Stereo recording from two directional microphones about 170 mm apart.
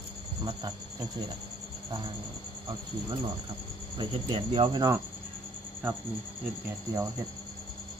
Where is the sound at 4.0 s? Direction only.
30° right (ahead or behind).